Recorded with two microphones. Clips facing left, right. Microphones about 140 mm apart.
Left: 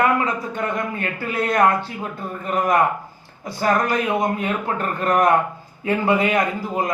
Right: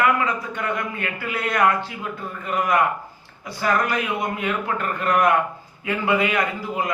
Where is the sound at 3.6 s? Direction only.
40° left (ahead or behind).